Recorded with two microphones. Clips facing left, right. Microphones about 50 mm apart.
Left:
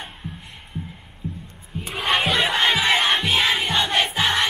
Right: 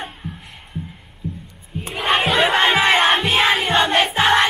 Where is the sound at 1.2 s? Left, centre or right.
Left.